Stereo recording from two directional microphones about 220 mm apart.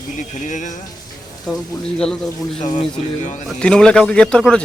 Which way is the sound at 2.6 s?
35° left (ahead or behind).